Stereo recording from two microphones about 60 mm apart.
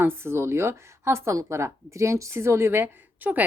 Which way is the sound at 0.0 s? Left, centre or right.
Right.